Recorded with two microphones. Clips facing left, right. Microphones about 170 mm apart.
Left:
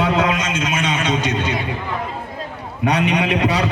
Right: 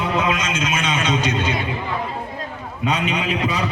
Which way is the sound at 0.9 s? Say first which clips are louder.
Left 1 dB; 60° left (ahead or behind).